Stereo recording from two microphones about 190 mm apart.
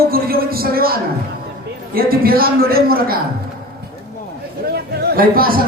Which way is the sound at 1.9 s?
50° right (ahead or behind).